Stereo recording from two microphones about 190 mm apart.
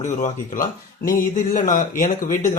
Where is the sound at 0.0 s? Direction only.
45° left (ahead or behind).